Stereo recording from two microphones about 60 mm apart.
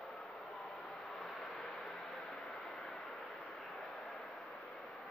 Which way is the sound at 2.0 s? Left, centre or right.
Centre.